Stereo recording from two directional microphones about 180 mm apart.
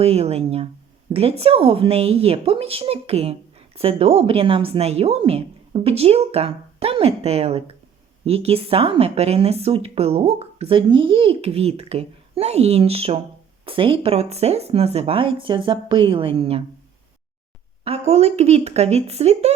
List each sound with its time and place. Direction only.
0.0 s a woman's voice: 35° right (ahead or behind)
17.8 s a woman's voice: 35° right (ahead or behind)